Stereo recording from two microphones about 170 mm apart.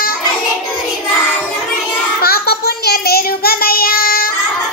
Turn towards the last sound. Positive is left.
turn(degrees=60)  # may be behind; listen again after turning